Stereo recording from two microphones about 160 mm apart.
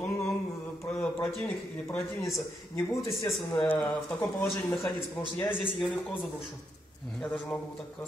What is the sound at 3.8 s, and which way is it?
Speech, 5° left (ahead or behind).